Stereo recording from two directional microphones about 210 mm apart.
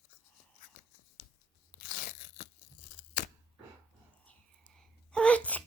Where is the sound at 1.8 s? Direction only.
35° left (ahead or behind).